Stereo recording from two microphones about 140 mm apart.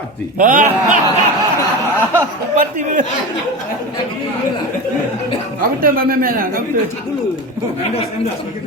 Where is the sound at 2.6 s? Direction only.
65° right (ahead or behind).